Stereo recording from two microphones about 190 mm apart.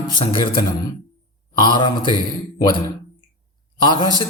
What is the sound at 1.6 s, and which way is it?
Speech, 25° left (ahead or behind).